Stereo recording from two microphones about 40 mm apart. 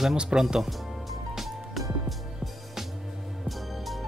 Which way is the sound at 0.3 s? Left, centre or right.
Centre.